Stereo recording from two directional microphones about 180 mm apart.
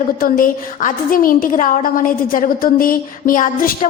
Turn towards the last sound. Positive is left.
turn(degrees=50)  # may be behind; listen again after turning